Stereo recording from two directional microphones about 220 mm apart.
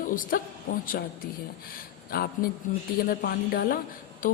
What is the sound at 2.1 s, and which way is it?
A woman's voice, 45° left (ahead or behind).